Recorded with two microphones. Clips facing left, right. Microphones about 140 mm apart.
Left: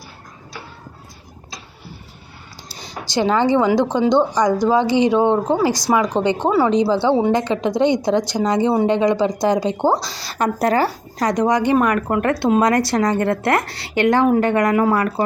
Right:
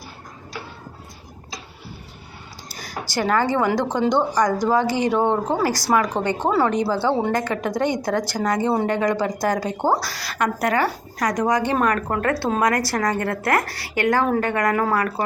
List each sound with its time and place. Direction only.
2.6 s a sound: 25° left (ahead or behind)
3.1 s a woman's voice: 20° left (ahead or behind)
4.7 s a woman's voice: 20° left (ahead or behind)